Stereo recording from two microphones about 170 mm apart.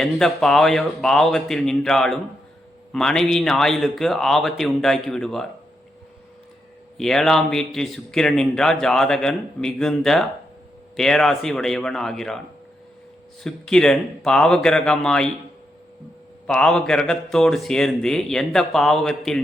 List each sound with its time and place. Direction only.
0.0 s a man's voice: centre (ahead or behind)
6.9 s a man's voice: 5° left (ahead or behind)
13.4 s a man's voice: 5° left (ahead or behind)
16.5 s a man's voice: 5° left (ahead or behind)